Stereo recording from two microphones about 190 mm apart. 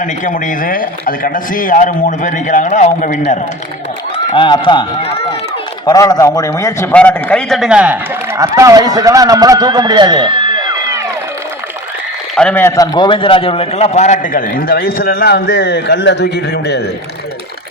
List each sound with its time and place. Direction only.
0.0 s a man's voice: 45° left (ahead or behind)
4.3 s a man's voice: 25° left (ahead or behind); by 7.9 s 5° right (ahead or behind)
8.4 s a man's voice: 20° right (ahead or behind)
12.4 s a man's voice: 10° left (ahead or behind); by 16.8 s 60° left (ahead or behind)